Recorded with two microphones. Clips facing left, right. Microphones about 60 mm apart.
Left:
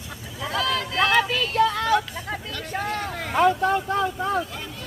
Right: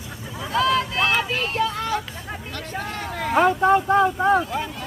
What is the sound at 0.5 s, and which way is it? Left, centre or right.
Vehicle, right.